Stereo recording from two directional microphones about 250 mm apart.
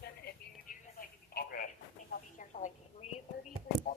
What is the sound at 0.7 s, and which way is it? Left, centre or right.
Telephone, left.